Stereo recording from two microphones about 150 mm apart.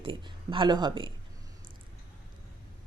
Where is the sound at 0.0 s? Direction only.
35° right (ahead or behind).